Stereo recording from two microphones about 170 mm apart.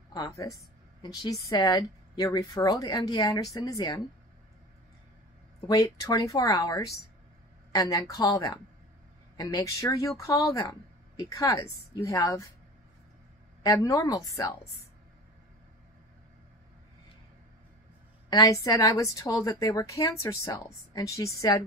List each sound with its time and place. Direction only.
0.1 s a woman's voice: 20° left (ahead or behind)
5.7 s a woman's voice: 20° left (ahead or behind)
13.6 s speech: 20° left (ahead or behind)
18.3 s a woman's voice: 20° left (ahead or behind)